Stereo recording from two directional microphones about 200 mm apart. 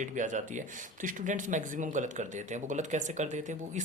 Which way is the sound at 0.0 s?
40° right (ahead or behind).